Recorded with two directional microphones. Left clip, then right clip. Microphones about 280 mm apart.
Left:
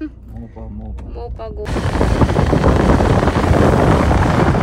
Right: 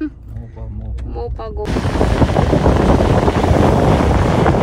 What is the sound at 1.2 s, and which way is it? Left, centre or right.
Speech, centre.